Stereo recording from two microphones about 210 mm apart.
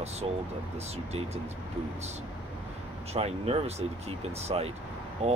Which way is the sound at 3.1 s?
30° right (ahead or behind).